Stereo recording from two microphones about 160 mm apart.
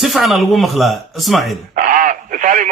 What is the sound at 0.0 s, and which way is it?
Speech, centre (ahead or behind).